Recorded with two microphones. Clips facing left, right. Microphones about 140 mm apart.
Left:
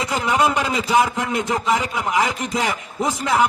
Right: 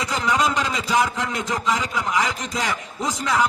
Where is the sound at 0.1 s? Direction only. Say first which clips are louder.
Left 3 dB; 15° left (ahead or behind).